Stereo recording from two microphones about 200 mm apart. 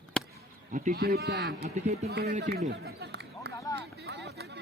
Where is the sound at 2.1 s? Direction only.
55° right (ahead or behind).